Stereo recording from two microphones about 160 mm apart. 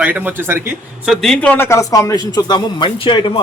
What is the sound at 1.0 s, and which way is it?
A man's voice, centre (ahead or behind).